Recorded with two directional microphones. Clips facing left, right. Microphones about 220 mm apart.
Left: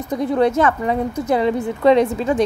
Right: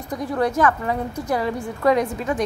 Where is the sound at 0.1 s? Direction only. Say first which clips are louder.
Left 5 dB; 25° left (ahead or behind).